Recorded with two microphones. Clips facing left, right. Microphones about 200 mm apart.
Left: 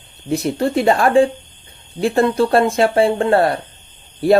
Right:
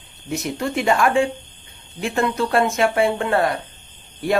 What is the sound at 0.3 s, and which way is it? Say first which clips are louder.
Speech: left 6 dB; 35° left (ahead or behind).